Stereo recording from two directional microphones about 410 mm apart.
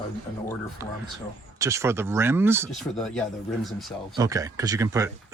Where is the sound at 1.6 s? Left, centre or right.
Centre.